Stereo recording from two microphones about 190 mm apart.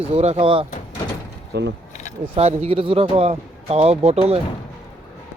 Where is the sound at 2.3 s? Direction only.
35° right (ahead or behind).